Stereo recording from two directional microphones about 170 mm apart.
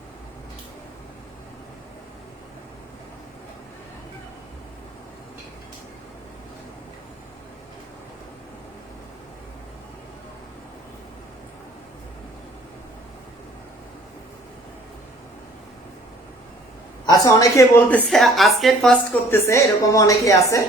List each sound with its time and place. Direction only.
17.1 s a woman's voice: 20° left (ahead or behind)
17.8 s a woman's voice: 5° left (ahead or behind)
19.3 s a woman's voice: 15° left (ahead or behind)